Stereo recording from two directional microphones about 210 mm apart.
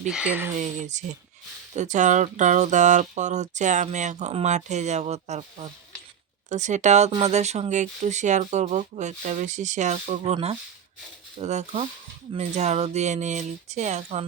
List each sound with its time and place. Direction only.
0.1 s speech: 5° right (ahead or behind)
0.6 s speech: 35° right (ahead or behind)